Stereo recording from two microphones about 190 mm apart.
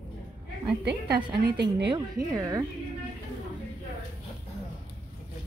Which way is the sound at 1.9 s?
20° right (ahead or behind).